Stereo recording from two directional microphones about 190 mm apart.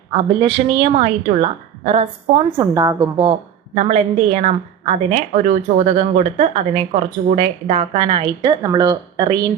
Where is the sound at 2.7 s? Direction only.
15° right (ahead or behind).